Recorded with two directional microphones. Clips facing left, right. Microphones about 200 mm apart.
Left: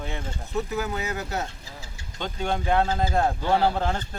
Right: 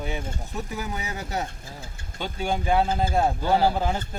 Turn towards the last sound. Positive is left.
turn(degrees=-5)  # may be behind; listen again after turning